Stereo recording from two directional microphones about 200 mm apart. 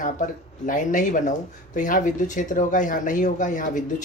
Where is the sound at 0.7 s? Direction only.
40° left (ahead or behind).